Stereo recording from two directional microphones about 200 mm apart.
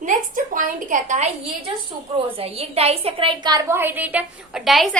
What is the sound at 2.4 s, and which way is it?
A woman's voice, 30° right (ahead or behind).